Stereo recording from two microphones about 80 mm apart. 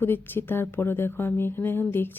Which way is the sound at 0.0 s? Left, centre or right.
Left.